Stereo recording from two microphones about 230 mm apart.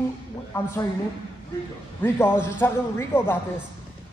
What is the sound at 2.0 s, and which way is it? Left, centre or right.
A man's voice, centre.